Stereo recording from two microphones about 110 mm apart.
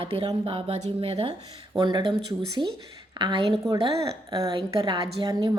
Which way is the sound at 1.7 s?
45° right (ahead or behind).